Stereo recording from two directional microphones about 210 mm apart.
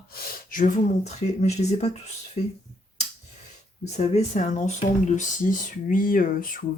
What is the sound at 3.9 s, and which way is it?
Speech, 30° left (ahead or behind).